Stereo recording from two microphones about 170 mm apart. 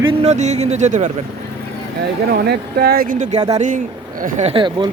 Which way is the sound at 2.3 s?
70° right (ahead or behind).